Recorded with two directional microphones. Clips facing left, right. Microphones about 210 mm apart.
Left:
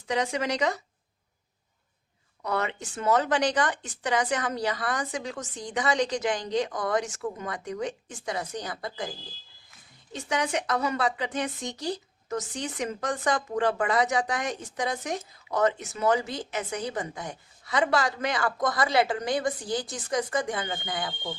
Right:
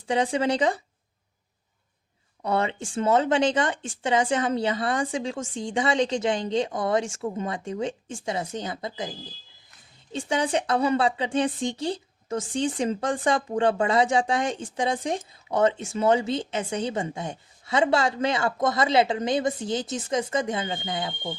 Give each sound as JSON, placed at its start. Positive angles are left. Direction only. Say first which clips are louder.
{"t": 0.1, "sound": "a woman's voice", "louder": "right 4 dB", "side_deg": -30}
{"t": 2.4, "sound": "a woman's voice", "louder": "right 4 dB", "side_deg": -30}